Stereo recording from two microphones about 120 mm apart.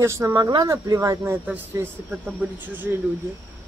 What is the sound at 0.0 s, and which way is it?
Speech, 25° right (ahead or behind).